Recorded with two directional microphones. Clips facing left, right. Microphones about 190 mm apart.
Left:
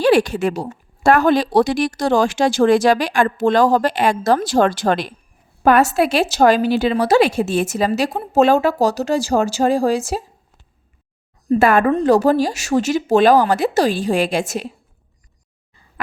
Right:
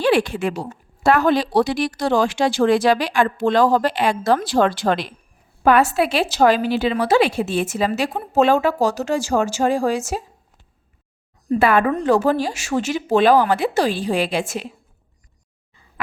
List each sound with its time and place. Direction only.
0.0 s a woman's voice: 40° left (ahead or behind)
11.6 s a woman's voice: 45° left (ahead or behind)